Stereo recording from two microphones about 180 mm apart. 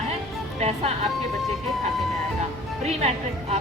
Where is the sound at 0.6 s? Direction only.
35° right (ahead or behind).